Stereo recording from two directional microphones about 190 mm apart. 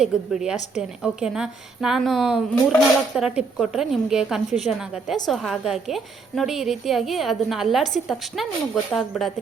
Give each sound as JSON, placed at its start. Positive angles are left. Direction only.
{"t": 0.0, "sound": "a woman's voice", "side_deg": -5}